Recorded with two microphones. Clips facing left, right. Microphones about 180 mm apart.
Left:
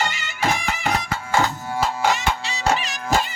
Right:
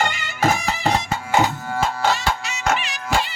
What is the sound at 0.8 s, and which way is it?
Music, 20° right (ahead or behind).